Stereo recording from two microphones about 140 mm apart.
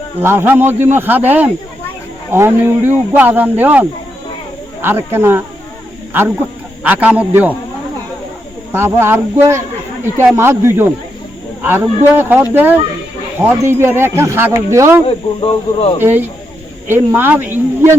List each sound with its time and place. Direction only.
0.2 s speech: 15° right (ahead or behind)
6.8 s speech: 10° right (ahead or behind)
8.7 s speech: 15° right (ahead or behind)
15.0 s speech: 45° left (ahead or behind)
16.0 s speech: 15° right (ahead or behind)